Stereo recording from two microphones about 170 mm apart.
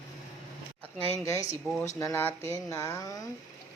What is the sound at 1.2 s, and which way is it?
Speech, 15° left (ahead or behind).